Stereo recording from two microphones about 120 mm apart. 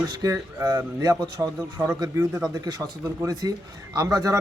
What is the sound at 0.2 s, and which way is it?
A man's voice, 25° right (ahead or behind).